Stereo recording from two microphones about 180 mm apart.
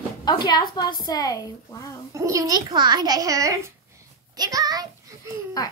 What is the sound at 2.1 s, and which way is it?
A child's voice, 20° right (ahead or behind).